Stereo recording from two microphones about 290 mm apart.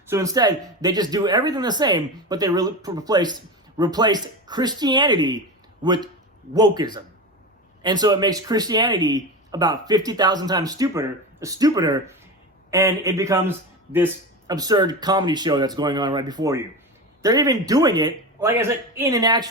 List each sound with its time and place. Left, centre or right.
0.1 s a man's voice: centre